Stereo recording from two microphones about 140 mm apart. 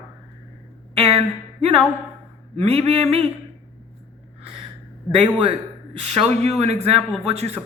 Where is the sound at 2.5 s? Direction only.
45° right (ahead or behind).